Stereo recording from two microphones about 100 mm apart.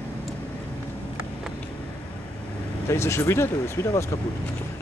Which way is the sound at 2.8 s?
25° left (ahead or behind).